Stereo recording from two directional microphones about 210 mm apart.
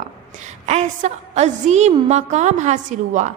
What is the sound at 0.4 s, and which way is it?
A woman's voice, 35° right (ahead or behind).